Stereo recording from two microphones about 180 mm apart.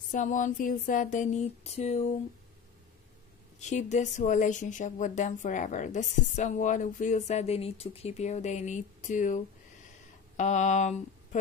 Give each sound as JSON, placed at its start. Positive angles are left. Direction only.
{"t": 0.1, "sound": "speech", "side_deg": 45}
{"t": 3.5, "sound": "speech", "side_deg": 40}